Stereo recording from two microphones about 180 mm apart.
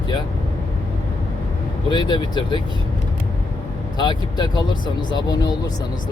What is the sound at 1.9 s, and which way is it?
Speech, 25° left (ahead or behind).